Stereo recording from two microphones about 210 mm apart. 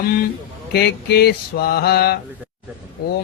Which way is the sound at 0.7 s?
50° left (ahead or behind).